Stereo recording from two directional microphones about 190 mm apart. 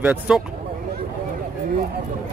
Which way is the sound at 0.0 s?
5° right (ahead or behind).